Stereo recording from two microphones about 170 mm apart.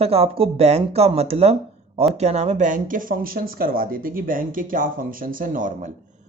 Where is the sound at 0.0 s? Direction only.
35° right (ahead or behind); by 5.9 s 50° right (ahead or behind).